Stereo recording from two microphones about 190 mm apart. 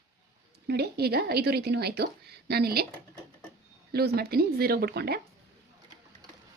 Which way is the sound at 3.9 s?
55° right (ahead or behind).